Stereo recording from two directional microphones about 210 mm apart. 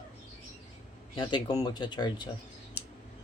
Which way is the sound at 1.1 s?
20° left (ahead or behind).